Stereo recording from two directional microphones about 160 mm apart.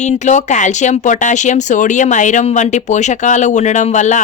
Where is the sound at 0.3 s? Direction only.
50° left (ahead or behind).